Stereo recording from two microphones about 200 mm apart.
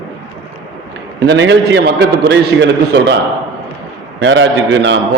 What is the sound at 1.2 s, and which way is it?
A man's voice, 60° right (ahead or behind).